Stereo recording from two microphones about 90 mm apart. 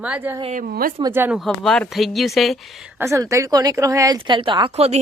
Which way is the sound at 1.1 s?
25° right (ahead or behind).